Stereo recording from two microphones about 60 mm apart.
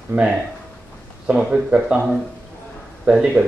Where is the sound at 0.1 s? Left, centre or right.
Centre.